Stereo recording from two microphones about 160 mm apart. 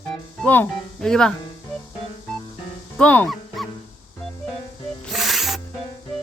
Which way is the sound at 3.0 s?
10° left (ahead or behind).